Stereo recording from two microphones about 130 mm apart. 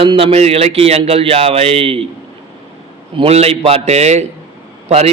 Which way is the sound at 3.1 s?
50° right (ahead or behind).